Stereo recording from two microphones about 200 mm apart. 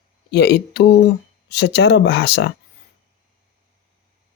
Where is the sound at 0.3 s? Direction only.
55° left (ahead or behind).